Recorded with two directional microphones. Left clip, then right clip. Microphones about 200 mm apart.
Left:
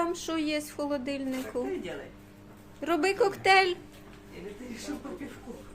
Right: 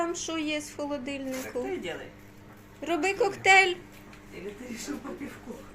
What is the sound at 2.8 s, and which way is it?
Speech, 15° left (ahead or behind).